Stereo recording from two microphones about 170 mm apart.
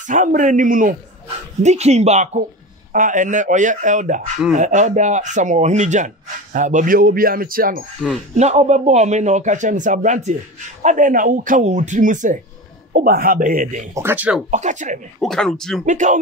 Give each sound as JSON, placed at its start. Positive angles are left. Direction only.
{"t": 0.0, "sound": "speech", "side_deg": -50}
{"t": 1.6, "sound": "speech", "side_deg": -40}
{"t": 8.4, "sound": "speech", "side_deg": -40}
{"t": 13.9, "sound": "speech", "side_deg": -10}
{"t": 14.5, "sound": "speech", "side_deg": -45}
{"t": 15.1, "sound": "speech", "side_deg": 5}
{"t": 15.8, "sound": "speech", "side_deg": -45}